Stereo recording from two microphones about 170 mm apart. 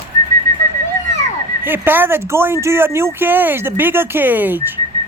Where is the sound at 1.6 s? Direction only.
10° right (ahead or behind).